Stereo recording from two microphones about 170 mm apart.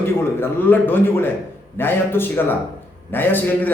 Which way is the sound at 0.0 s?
15° left (ahead or behind).